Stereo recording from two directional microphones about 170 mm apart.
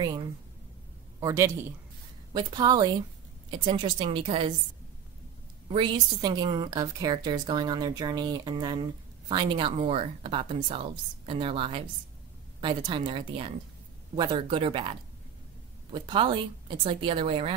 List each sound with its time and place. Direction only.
1.2 s a man's voice: 15° right (ahead or behind)
5.7 s a woman's voice: 30° right (ahead or behind)